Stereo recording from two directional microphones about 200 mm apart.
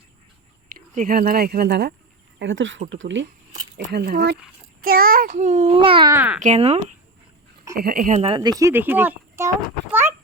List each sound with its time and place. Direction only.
0.7 s speech: 45° right (ahead or behind)
2.4 s speech: 70° right (ahead or behind)
3.8 s a child's voice: 55° right (ahead or behind); by 6.1 s 25° right (ahead or behind)
6.1 s speech: 10° right (ahead or behind)
6.4 s a child's voice: 35° right (ahead or behind)
7.8 s a child's voice: 45° right (ahead or behind)
8.4 s speech: 20° right (ahead or behind)